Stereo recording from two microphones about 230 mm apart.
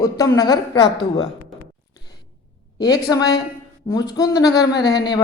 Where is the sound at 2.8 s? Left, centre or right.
Centre.